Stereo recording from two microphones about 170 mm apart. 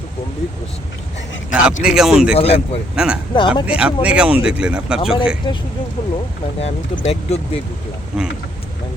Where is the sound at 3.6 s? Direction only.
5° right (ahead or behind).